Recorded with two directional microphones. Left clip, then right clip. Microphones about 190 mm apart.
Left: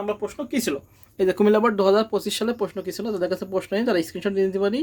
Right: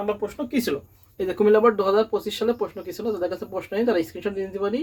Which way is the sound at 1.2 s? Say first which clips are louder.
Even; 55° left (ahead or behind).